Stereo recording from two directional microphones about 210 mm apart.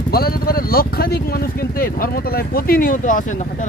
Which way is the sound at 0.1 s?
45° left (ahead or behind).